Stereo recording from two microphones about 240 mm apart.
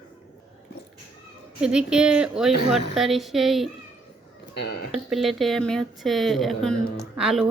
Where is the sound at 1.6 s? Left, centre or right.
Centre.